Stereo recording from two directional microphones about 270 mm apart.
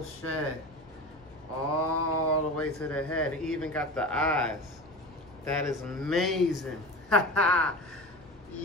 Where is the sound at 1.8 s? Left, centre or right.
Left.